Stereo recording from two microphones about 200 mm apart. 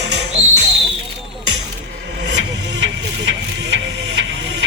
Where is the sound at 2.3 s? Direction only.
65° right (ahead or behind).